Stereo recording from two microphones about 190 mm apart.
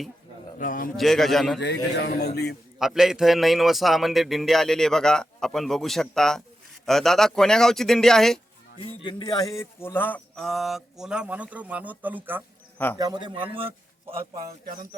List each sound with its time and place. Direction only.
0.6 s a man's voice: 45° left (ahead or behind)
0.9 s a man's voice: centre (ahead or behind)
1.5 s a man's voice: 65° left (ahead or behind)
2.7 s a man's voice: centre (ahead or behind)
9.0 s a man's voice: 20° left (ahead or behind); by 12.4 s 10° right (ahead or behind)
13.0 s a man's voice: 20° right (ahead or behind)